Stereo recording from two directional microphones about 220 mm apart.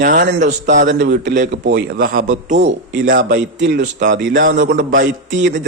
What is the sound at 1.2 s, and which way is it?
Speech, 35° right (ahead or behind).